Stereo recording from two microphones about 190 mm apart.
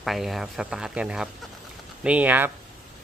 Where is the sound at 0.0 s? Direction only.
Centre (ahead or behind).